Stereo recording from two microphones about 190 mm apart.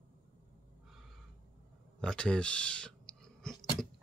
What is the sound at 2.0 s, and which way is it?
Clicking, 5° left (ahead or behind).